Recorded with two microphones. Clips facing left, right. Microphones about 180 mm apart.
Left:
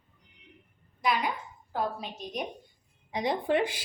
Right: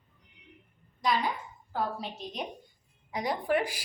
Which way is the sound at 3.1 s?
25° left (ahead or behind).